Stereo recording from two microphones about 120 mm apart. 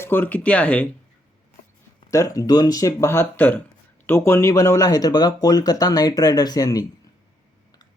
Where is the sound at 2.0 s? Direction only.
25° left (ahead or behind).